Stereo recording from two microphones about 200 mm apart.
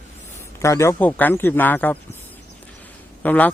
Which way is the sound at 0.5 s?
15° left (ahead or behind).